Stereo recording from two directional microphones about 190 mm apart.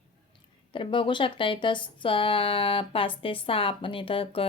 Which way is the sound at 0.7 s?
25° left (ahead or behind).